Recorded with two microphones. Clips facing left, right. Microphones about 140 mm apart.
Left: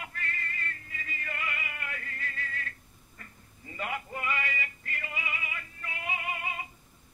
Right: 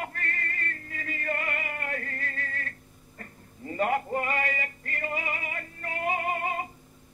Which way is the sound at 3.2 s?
45° right (ahead or behind).